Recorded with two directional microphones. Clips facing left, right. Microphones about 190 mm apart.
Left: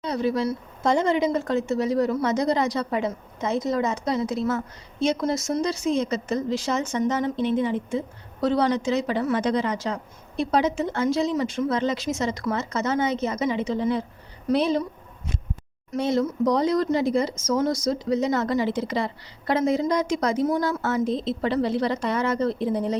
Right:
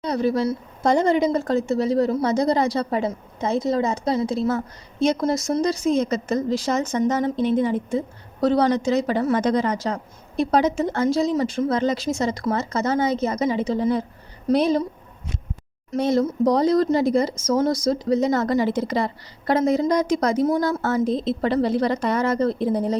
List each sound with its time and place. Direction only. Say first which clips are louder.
0.0 s a woman's voice: right 3 dB; 40° right (ahead or behind)
15.9 s a woman's voice: right 3 dB; 40° right (ahead or behind)